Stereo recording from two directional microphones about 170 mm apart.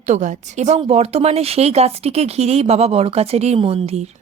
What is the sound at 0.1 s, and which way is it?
Speech, 45° right (ahead or behind).